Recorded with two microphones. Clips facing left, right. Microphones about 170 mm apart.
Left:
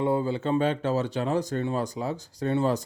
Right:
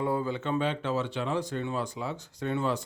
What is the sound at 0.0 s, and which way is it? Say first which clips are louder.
Speech: left 4 dB; 25° left (ahead or behind).